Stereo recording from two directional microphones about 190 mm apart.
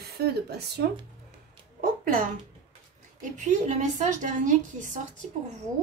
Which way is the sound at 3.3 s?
40° right (ahead or behind).